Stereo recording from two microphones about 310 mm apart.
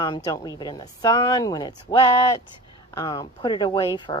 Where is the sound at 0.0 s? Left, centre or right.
Centre.